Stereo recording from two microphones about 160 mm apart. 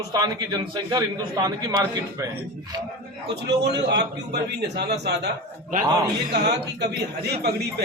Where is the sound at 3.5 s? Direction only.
90° right.